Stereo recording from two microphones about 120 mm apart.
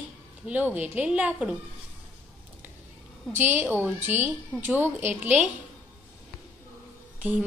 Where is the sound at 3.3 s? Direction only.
15° right (ahead or behind).